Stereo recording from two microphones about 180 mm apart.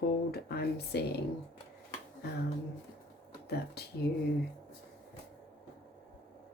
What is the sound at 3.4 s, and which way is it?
Speech, 65° left (ahead or behind).